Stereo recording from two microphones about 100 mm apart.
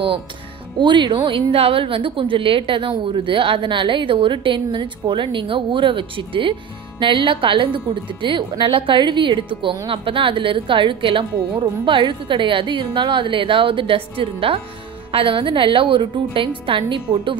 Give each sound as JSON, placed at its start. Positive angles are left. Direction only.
{"t": 0.7, "sound": "speech", "side_deg": -50}
{"t": 1.5, "sound": "a woman's voice", "side_deg": -70}